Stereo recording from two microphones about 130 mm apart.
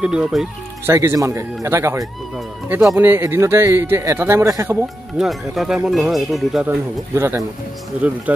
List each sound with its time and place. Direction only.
0.0 s speech: 5° right (ahead or behind)
0.8 s speech: 20° right (ahead or behind)
5.1 s speech: centre (ahead or behind)
7.2 s speech: 20° right (ahead or behind)